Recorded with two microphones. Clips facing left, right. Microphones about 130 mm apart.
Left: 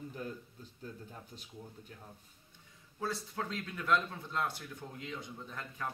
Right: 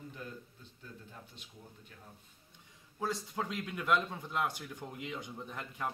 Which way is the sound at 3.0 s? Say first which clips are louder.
Right 1 dB; 15° right (ahead or behind).